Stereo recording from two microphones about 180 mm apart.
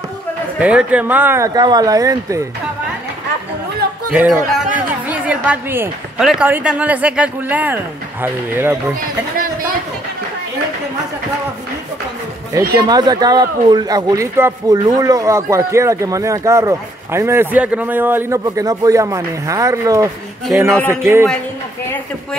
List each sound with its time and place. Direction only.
0.6 s a man's voice: 5° right (ahead or behind)
4.1 s a man's voice: 5° right (ahead or behind)
4.7 s a sound: 10° right (ahead or behind)
6.1 s a man's voice: 5° right (ahead or behind)
9.4 s a sound: 50° right (ahead or behind)
12.8 s a man's voice: 25° right (ahead or behind)